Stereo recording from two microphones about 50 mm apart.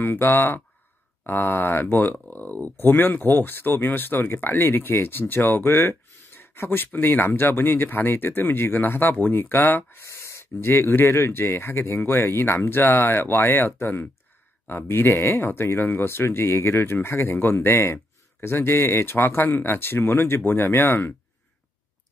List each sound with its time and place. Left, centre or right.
0.0 s speech: left
2.2 s speech: left
2.8 s speech: left
6.4 s a sound: left
6.9 s speech: left
10.0 s speech: left